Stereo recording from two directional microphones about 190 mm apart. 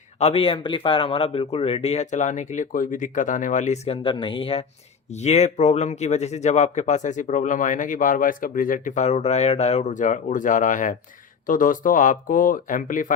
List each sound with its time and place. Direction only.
0.2 s speech: 30° left (ahead or behind)